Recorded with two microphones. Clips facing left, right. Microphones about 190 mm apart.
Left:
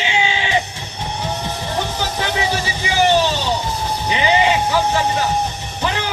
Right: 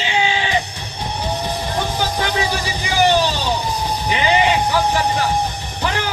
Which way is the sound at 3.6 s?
15° right (ahead or behind).